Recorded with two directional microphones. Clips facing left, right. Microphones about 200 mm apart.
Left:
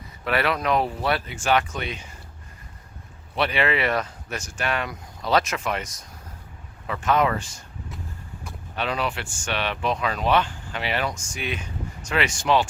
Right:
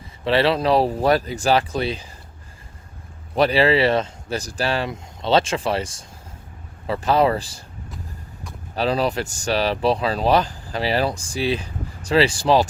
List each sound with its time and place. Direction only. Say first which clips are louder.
0.3 s speech: right 5 dB; 30° right (ahead or behind)
3.3 s speech: right 7 dB; 35° right (ahead or behind)
8.7 s speech: right 6 dB; 35° right (ahead or behind)